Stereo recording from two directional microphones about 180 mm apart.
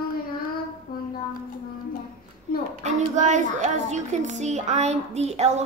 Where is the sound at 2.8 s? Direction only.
40° right (ahead or behind).